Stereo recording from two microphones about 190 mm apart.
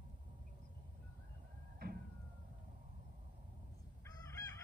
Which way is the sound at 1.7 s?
55° right (ahead or behind).